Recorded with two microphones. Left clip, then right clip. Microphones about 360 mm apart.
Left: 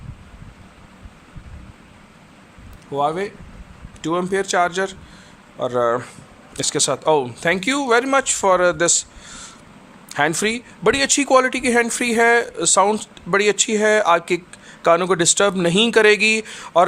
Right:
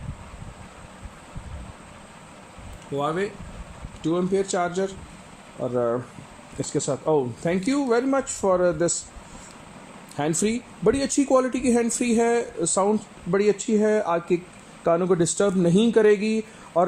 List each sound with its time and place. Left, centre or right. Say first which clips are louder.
3.0 s speech: left 5 dB; centre
4.3 s speech: left 5 dB; centre
5.5 s speech: left 5 dB; left
10.1 s speech: left 6 dB; left
12.6 s speech: left 6 dB; left